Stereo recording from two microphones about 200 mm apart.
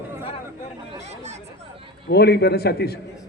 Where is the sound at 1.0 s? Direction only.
35° right (ahead or behind).